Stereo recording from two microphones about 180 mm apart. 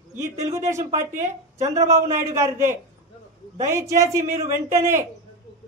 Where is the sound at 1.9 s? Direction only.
15° right (ahead or behind).